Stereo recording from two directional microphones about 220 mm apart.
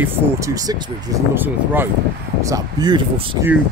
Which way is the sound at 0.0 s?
10° right (ahead or behind).